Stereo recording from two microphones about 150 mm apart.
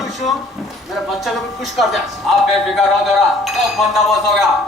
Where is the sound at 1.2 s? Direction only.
Centre (ahead or behind).